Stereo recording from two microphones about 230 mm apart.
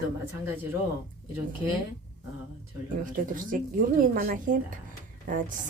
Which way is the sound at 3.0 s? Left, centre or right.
Right.